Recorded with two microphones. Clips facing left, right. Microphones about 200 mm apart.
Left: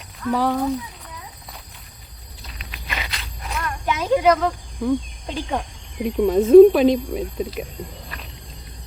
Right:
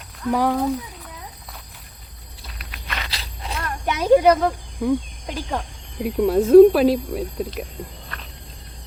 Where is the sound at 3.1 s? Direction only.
30° right (ahead or behind).